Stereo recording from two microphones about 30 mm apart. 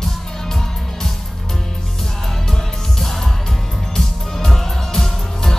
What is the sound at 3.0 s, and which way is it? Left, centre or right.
Music, centre.